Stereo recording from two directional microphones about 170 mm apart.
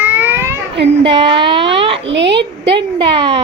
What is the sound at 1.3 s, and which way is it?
Speech, 30° right (ahead or behind).